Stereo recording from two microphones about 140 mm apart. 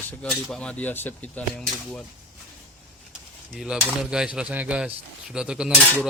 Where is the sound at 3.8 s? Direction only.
10° right (ahead or behind).